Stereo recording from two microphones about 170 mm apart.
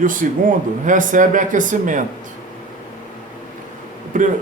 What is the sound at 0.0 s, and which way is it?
Speech, 50° right (ahead or behind).